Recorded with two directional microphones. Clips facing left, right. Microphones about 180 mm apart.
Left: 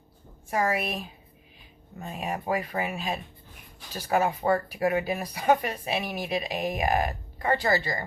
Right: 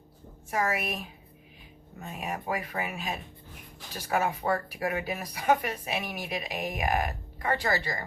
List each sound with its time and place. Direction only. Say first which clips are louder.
0.5 s speech: left 3 dB; 30° left (ahead or behind)
2.0 s speech: left 3 dB; 30° left (ahead or behind)